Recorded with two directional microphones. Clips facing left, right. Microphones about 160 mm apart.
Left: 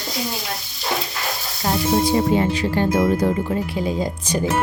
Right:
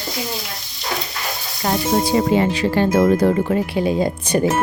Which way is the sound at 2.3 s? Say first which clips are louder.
Right 2 dB; 85° right.